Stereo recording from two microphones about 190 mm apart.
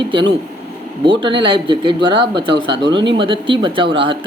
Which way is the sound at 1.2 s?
25° right (ahead or behind).